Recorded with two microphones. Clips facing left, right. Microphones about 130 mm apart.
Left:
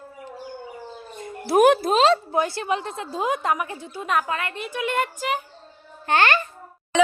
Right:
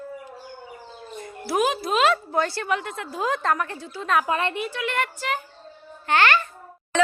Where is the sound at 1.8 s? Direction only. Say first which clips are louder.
Left 3 dB; 30° left (ahead or behind).